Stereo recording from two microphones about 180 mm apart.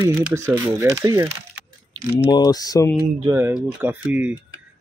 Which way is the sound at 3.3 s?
10° right (ahead or behind).